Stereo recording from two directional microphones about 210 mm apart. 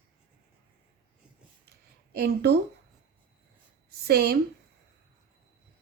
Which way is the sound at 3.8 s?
50° right (ahead or behind).